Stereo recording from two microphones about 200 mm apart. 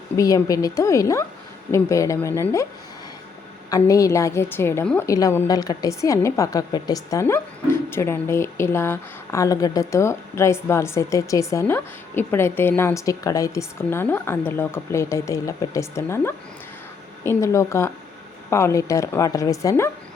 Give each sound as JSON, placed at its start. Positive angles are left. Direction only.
{"t": 0.2, "sound": "a woman's voice", "side_deg": 15}
{"t": 3.7, "sound": "a woman's voice", "side_deg": 15}